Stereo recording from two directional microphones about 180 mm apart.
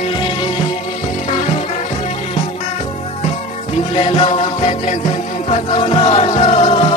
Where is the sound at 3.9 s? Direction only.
30° left (ahead or behind).